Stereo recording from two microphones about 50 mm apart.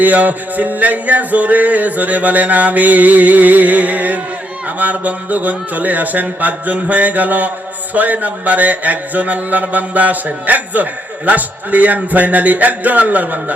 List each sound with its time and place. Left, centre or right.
0.0 s music: right